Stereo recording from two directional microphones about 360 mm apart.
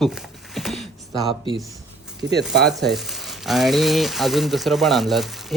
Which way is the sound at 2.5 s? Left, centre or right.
Right.